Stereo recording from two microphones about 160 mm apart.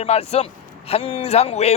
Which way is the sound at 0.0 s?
40° left (ahead or behind).